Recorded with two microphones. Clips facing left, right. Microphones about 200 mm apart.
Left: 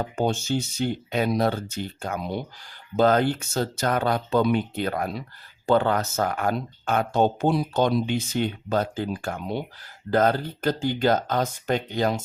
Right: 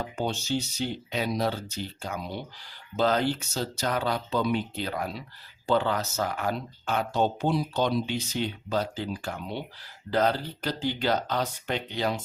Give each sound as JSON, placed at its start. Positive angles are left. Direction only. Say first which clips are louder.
{"t": 0.0, "sound": "speech", "louder": "left 6 dB", "side_deg": 50}